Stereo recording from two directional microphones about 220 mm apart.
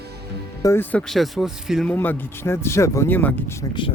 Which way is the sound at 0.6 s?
10° left (ahead or behind).